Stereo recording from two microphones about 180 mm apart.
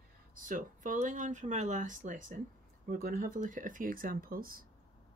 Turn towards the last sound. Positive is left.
turn(degrees=-55)  # may be behind; listen again after turning